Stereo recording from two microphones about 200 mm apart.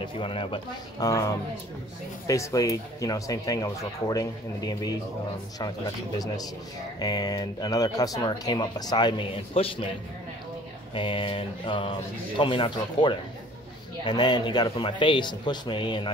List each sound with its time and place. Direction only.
0.0 s speech: 25° left (ahead or behind)
6.1 s speech: 20° left (ahead or behind)
11.0 s speech: 25° left (ahead or behind)